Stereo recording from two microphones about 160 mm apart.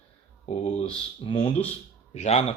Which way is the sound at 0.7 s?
35° left (ahead or behind).